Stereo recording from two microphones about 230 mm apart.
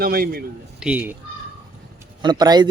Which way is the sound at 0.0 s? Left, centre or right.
Right.